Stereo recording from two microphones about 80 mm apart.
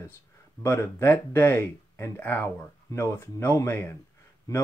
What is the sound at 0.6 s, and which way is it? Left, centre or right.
Speech, left.